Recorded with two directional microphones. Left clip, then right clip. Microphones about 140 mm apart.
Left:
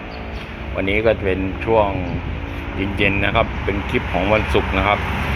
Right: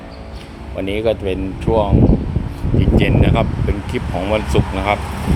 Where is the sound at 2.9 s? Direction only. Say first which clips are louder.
Even; 25° right (ahead or behind).